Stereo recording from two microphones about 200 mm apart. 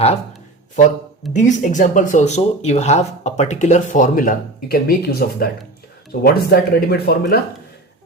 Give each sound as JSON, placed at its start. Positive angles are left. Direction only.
{"t": 1.3, "sound": "speech", "side_deg": 35}